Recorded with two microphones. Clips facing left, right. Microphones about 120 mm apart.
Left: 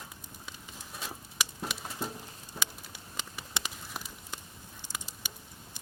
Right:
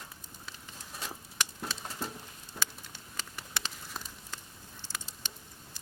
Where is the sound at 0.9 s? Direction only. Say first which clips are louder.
Even; 10° left (ahead or behind).